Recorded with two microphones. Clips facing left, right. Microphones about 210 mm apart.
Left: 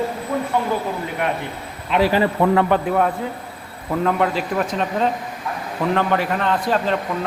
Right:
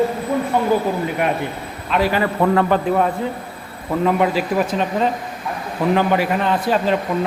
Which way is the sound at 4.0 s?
5° right (ahead or behind).